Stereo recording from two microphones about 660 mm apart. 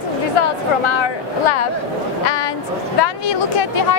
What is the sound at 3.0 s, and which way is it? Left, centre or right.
Speech, left.